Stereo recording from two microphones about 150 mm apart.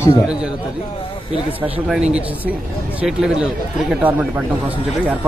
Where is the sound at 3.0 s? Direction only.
5° right (ahead or behind).